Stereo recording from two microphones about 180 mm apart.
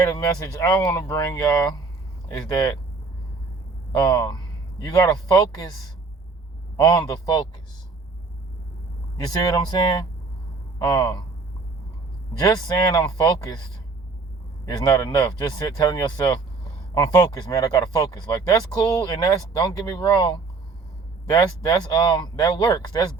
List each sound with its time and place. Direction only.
0.1 s speech: 20° left (ahead or behind)
3.9 s speech: 25° left (ahead or behind)
6.7 s a man's voice: 20° left (ahead or behind)
9.1 s speech: 20° left (ahead or behind)
12.4 s speech: 20° left (ahead or behind)
14.7 s speech: 20° left (ahead or behind)